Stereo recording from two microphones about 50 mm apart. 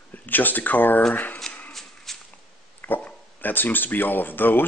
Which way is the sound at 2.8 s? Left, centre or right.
Left.